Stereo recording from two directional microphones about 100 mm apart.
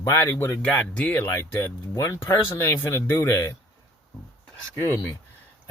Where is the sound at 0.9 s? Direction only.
15° left (ahead or behind).